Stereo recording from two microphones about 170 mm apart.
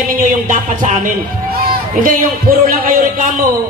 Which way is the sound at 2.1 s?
55° right (ahead or behind).